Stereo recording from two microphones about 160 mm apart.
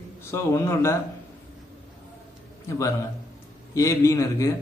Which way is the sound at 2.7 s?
20° left (ahead or behind).